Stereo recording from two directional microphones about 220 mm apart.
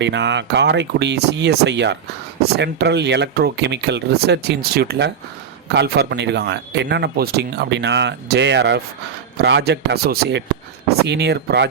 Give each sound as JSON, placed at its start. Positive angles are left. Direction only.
{"t": 0.0, "sound": "speech", "side_deg": -55}